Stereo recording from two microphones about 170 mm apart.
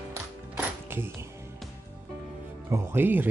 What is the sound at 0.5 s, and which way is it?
Music, 15° right (ahead or behind).